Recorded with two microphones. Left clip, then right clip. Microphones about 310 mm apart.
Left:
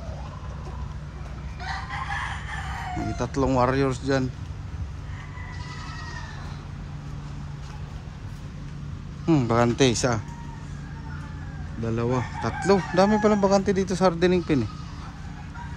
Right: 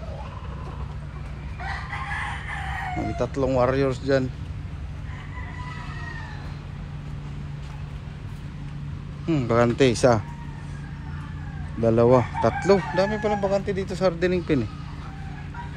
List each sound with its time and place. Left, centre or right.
3.0 s speech: centre
9.2 s speech: centre
11.8 s speech: centre
12.9 s speech: centre